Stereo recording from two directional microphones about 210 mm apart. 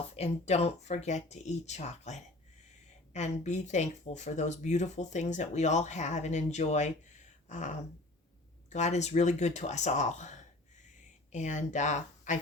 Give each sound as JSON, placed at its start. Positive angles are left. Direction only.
{"t": 0.2, "sound": "speech", "side_deg": 30}